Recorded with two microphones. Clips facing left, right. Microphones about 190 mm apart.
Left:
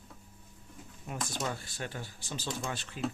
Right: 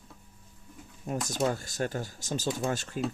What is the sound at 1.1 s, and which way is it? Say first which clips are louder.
Speech: right 7 dB; 40° right (ahead or behind).